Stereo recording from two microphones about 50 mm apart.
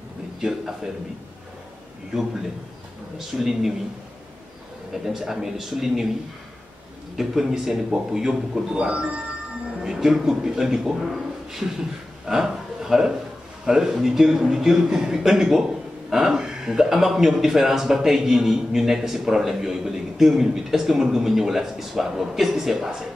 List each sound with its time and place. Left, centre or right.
0.4 s a man's voice: centre
3.2 s a man's voice: centre
4.9 s a man's voice: centre
7.2 s a man's voice: centre
9.8 s a man's voice: centre
11.6 s speech: right
12.3 s a man's voice: centre